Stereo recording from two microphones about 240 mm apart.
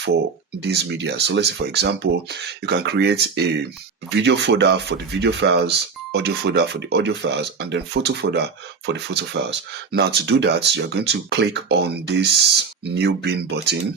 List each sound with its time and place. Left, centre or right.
0.6 s speech: right